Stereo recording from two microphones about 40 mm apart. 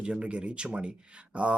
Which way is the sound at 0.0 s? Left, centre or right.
Right.